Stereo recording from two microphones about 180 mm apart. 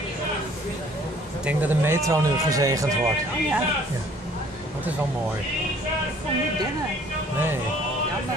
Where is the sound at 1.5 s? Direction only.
10° right (ahead or behind).